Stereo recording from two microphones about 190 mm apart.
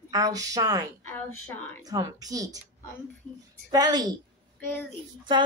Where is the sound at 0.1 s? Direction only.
20° right (ahead or behind).